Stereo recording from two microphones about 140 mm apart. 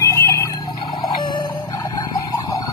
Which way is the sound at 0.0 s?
20° left (ahead or behind).